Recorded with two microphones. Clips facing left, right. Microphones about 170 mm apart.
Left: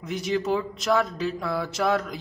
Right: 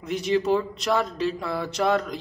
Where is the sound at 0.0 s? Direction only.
Centre (ahead or behind).